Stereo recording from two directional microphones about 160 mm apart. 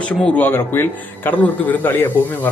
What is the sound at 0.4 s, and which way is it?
A man's voice, 15° left (ahead or behind).